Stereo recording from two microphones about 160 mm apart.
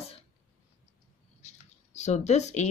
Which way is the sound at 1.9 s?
45° left (ahead or behind).